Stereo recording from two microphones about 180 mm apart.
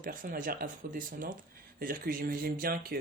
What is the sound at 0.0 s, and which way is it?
Speech, 50° right (ahead or behind).